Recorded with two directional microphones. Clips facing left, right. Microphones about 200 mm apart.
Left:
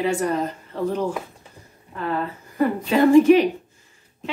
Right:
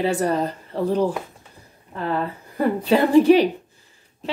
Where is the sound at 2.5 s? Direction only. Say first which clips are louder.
Right 1 dB; 35° right (ahead or behind).